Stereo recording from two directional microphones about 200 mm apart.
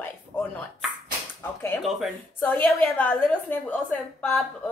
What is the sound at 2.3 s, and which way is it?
A woman's voice, 10° left (ahead or behind).